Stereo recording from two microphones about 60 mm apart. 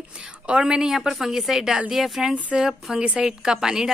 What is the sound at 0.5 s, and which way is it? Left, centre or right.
A woman's voice, centre.